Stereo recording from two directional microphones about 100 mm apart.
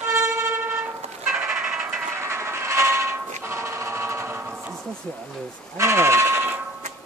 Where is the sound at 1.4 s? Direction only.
15° right (ahead or behind).